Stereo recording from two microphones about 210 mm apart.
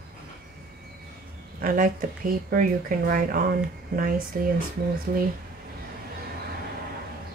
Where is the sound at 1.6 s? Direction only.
40° right (ahead or behind).